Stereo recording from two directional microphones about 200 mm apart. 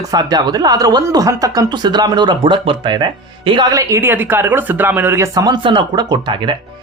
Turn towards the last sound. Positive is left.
turn(degrees=-25)  # may be behind; listen again after turning